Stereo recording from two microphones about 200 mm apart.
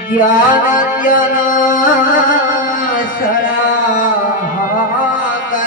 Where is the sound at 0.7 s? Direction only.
40° left (ahead or behind).